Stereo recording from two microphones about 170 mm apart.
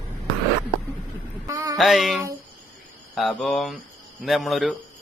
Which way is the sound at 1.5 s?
20° right (ahead or behind).